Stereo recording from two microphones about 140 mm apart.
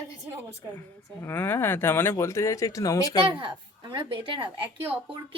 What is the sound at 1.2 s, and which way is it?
Speech, 15° left (ahead or behind).